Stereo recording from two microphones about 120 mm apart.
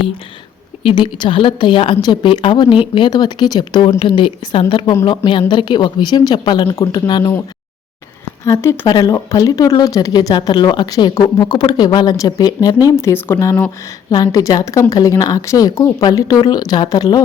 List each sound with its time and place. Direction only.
0.8 s a woman's voice: 45° left (ahead or behind)
8.4 s a woman's voice: 20° left (ahead or behind)
8.9 s a woman's voice: 35° left (ahead or behind)